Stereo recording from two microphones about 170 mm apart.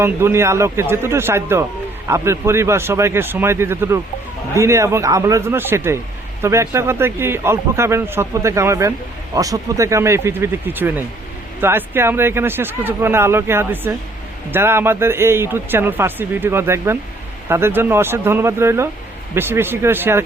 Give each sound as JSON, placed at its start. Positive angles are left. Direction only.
{"t": 0.0, "sound": "speech", "side_deg": -15}